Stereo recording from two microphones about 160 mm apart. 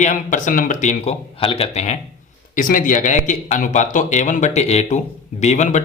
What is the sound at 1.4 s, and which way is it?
Speech, 35° left (ahead or behind).